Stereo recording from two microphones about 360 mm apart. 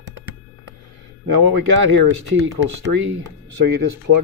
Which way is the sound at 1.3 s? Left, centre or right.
Right.